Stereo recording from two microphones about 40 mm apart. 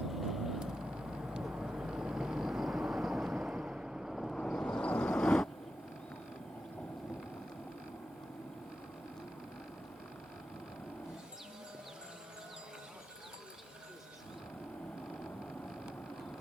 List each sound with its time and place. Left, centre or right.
0.1 s vehicle: centre
0.6 s vehicle: centre
4.1 s vehicle: centre
4.4 s vehicle: centre
4.8 s vehicle: left
5.2 s vehicle: centre